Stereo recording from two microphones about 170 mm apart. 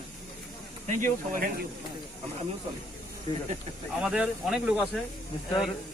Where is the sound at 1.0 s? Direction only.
50° right (ahead or behind).